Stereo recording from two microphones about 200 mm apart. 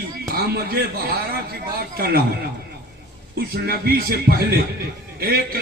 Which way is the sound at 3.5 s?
50° right (ahead or behind).